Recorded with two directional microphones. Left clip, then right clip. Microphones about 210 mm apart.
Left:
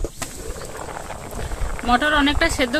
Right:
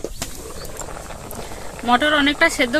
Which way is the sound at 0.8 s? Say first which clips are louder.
Left 1 dB; 5° left (ahead or behind).